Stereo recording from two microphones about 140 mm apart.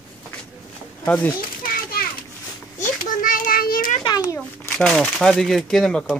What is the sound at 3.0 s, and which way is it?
Child singing, 75° left (ahead or behind).